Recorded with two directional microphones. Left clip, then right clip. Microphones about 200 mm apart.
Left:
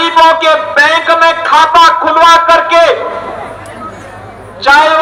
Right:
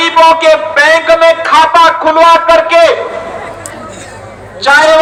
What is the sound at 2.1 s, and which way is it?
Speech, 20° right (ahead or behind).